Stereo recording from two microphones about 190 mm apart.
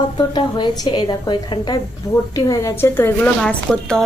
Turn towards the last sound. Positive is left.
turn(degrees=5)  # may be behind; listen again after turning